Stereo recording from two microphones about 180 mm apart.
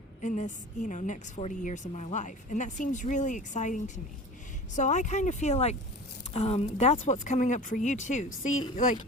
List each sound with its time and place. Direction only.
0.2 s a woman's voice: 45° left (ahead or behind)